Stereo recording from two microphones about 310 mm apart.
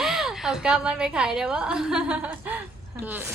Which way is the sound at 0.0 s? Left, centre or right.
Centre.